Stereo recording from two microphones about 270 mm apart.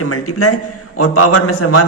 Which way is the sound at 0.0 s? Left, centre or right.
Left.